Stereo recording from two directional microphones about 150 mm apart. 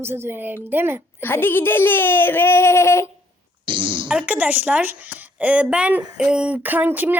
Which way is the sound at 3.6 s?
35° right (ahead or behind).